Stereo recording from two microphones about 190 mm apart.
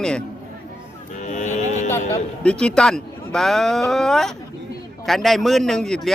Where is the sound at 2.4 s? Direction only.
5° left (ahead or behind).